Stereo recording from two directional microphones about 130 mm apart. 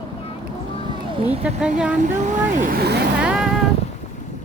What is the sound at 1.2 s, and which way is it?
Speech, 50° right (ahead or behind).